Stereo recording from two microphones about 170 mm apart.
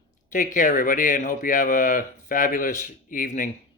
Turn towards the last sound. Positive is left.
turn(degrees=50)  # may be behind; listen again after turning